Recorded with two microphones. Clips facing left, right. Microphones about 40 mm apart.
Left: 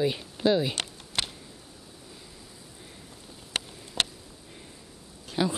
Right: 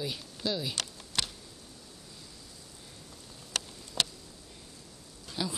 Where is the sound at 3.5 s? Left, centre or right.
Left.